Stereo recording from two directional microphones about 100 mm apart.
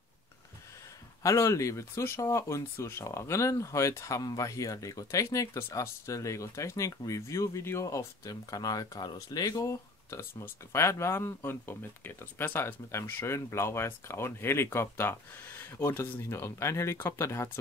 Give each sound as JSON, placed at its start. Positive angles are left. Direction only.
{"t": 1.2, "sound": "speech", "side_deg": 30}